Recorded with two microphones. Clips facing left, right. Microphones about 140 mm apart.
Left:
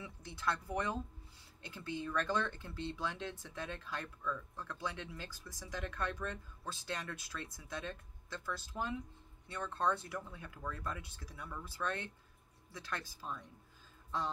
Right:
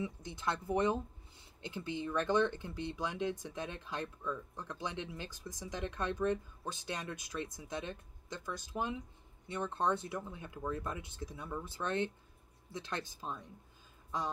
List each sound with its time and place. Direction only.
0.0 s speech: 20° right (ahead or behind)
14.1 s music: 15° right (ahead or behind)